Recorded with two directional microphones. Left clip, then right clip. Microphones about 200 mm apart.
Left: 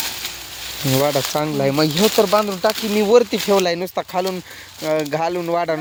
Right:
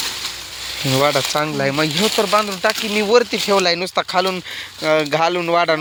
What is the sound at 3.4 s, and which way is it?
Speech, 20° left (ahead or behind).